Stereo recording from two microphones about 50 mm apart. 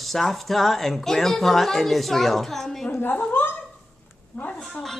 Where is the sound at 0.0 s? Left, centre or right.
Centre.